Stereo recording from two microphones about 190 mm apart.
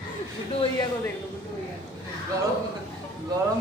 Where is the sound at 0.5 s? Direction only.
30° left (ahead or behind).